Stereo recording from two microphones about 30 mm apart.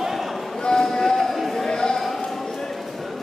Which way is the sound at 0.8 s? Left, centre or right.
Centre.